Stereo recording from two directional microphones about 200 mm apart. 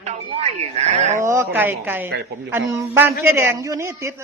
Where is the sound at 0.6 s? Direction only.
35° right (ahead or behind).